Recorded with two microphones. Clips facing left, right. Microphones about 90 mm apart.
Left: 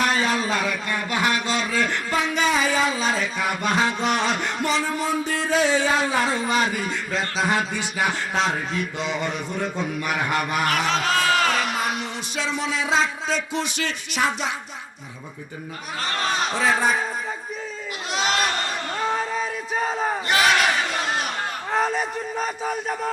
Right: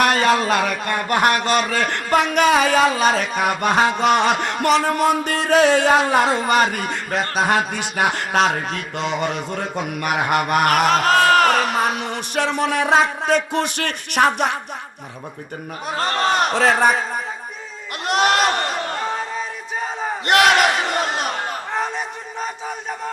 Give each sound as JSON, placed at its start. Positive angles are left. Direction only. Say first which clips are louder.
{"t": 0.0, "sound": "speech", "louder": "right 6 dB", "side_deg": -70}
{"t": 15.9, "sound": "speech", "louder": "right 6 dB", "side_deg": -55}
{"t": 18.0, "sound": "speech", "louder": "right 7 dB", "side_deg": -60}
{"t": 19.1, "sound": "battle cry", "louder": "left 1 dB", "side_deg": 0}
{"t": 20.2, "sound": "battle cry", "louder": "right 6 dB", "side_deg": -65}
{"t": 21.7, "sound": "speech", "louder": "left 5 dB", "side_deg": 0}